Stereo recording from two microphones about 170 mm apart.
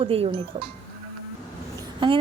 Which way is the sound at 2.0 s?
30° right (ahead or behind).